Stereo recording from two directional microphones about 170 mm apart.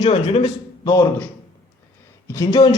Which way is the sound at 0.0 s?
35° left (ahead or behind).